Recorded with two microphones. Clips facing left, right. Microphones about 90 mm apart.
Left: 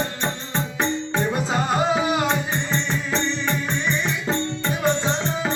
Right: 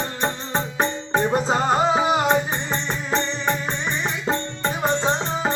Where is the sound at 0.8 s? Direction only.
35° right (ahead or behind).